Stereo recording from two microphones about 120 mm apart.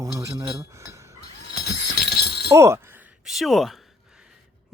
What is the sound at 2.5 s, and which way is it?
Chink, 25° right (ahead or behind).